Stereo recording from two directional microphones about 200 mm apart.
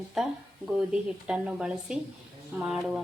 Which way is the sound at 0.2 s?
Centre (ahead or behind).